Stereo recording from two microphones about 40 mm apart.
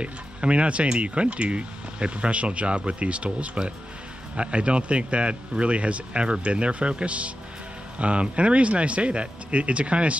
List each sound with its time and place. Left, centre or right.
0.0 s speech: right